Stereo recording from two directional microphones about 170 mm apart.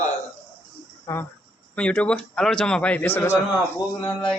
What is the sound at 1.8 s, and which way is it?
A man's voice, 5° left (ahead or behind).